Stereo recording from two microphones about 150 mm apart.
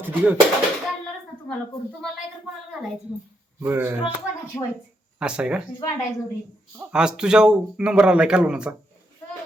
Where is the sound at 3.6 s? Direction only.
15° right (ahead or behind).